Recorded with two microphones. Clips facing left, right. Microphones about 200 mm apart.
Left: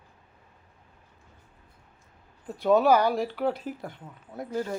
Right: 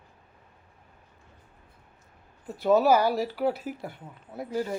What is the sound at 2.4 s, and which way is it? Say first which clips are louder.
Speech: even; 5° right (ahead or behind).